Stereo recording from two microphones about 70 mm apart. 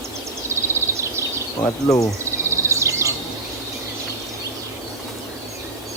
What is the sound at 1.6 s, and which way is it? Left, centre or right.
Speech, left.